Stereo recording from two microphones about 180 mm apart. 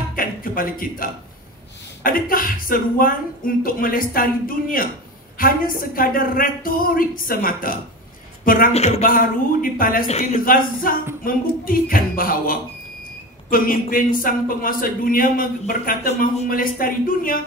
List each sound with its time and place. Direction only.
0.1 s music: 50° left (ahead or behind)
2.0 s speech: 50° left (ahead or behind)
8.7 s speech: 35° left (ahead or behind); by 10.0 s 50° left (ahead or behind)
10.0 s speech: 35° left (ahead or behind)
10.4 s speech: 50° left (ahead or behind)